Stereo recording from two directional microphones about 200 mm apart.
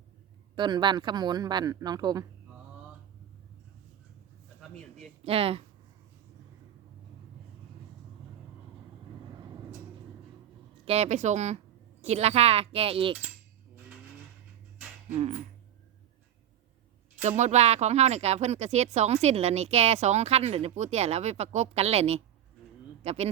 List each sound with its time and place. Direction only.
0.5 s speech: 25° right (ahead or behind)
5.2 s speech: 30° right (ahead or behind)
10.8 s speech: 35° right (ahead or behind)
15.1 s speech: 35° right (ahead or behind)
17.2 s speech: 35° right (ahead or behind)